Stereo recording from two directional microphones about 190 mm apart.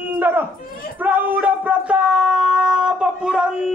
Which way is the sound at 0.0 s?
10° right (ahead or behind).